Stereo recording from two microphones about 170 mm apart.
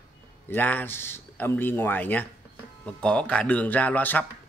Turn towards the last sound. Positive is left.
turn(degrees=10)  # may be behind; listen again after turning